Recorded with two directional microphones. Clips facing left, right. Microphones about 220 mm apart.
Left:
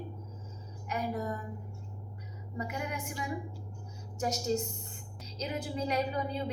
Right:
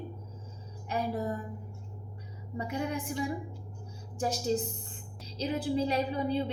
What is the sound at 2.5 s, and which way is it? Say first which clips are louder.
A woman's voice: right 4 dB; 30° right (ahead or behind).